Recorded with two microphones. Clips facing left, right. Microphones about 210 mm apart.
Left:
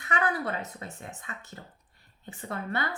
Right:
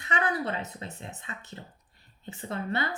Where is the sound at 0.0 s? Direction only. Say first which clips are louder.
Even; 20° right (ahead or behind).